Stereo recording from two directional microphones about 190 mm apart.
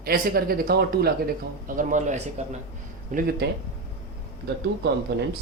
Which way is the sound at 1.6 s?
45° right (ahead or behind).